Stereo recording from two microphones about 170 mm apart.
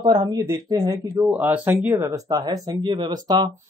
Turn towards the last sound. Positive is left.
turn(degrees=-25)  # may be behind; listen again after turning